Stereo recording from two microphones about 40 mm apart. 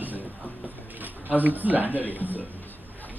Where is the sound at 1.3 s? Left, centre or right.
Right.